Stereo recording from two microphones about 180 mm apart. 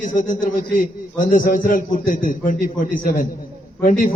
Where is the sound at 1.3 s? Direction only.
50° left (ahead or behind).